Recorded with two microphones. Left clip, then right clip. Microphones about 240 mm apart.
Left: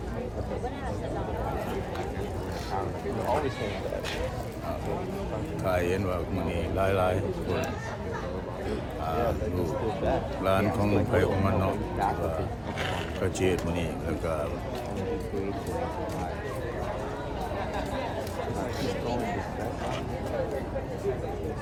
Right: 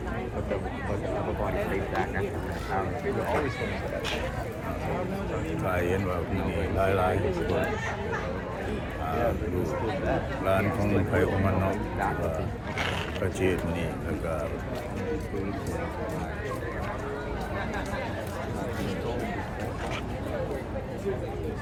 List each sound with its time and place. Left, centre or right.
5.7 s speech: centre
10.4 s speech: centre
13.4 s speech: centre